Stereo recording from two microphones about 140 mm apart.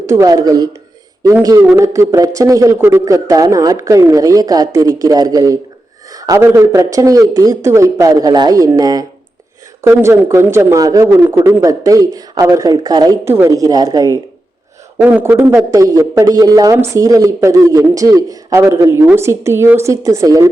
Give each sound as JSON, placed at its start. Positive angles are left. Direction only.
{"t": 0.0, "sound": "a man's voice", "side_deg": -20}
{"t": 15.0, "sound": "a man's voice", "side_deg": -10}